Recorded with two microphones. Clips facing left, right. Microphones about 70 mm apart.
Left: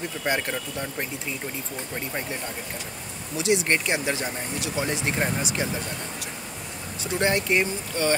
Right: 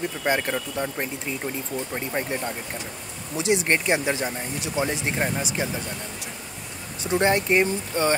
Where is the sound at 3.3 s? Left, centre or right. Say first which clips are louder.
Right 1 dB; right.